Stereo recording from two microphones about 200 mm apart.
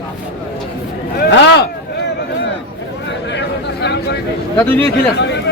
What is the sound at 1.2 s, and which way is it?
Speech, 60° left (ahead or behind).